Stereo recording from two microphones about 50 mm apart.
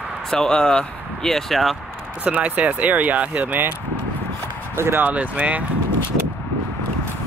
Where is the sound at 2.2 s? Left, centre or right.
Right.